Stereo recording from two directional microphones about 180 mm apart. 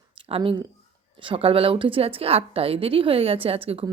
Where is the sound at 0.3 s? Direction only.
30° right (ahead or behind).